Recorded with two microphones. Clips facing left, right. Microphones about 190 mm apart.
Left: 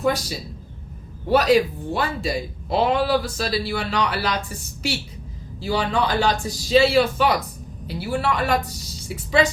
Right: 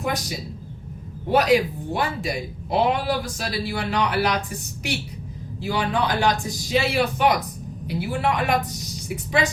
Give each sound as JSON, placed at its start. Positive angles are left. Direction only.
{"t": 0.0, "sound": "a man's voice", "side_deg": -15}